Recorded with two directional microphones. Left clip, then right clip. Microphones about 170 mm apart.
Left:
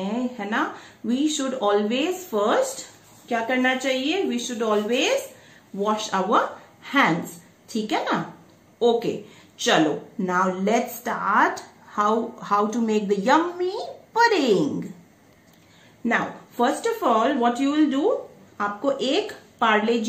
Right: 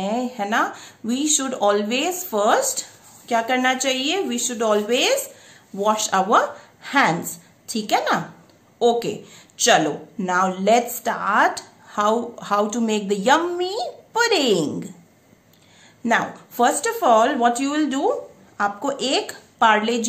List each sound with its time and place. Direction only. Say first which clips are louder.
0.0 s a woman's voice: right 5 dB; 50° right (ahead or behind)
10.2 s speech: right 3 dB; 60° right (ahead or behind)
16.0 s speech: right 3 dB; 55° right (ahead or behind)